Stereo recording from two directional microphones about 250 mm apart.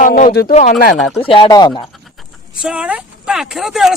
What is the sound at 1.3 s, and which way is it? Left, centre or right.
Speech, centre.